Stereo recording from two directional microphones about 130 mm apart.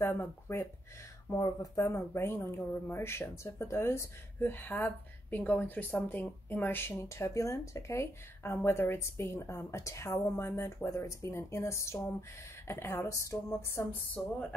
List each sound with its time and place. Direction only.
0.0 s speech: 20° left (ahead or behind)